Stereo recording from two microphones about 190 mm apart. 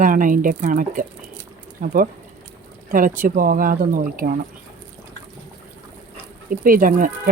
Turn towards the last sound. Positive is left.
turn(degrees=-45)  # may be behind; listen again after turning